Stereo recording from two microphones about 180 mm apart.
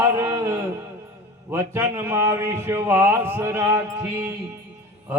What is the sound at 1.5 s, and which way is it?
Mantra, 15° right (ahead or behind).